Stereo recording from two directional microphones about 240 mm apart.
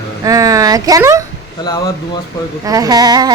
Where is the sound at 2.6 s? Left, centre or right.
Centre.